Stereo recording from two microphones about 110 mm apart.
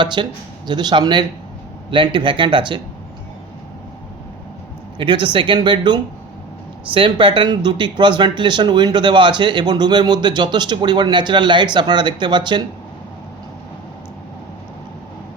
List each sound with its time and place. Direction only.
0.0 s speech: 45° right (ahead or behind)
4.9 s speech: 45° right (ahead or behind)